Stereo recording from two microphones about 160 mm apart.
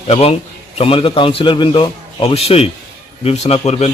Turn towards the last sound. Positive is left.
turn(degrees=40)  # may be behind; listen again after turning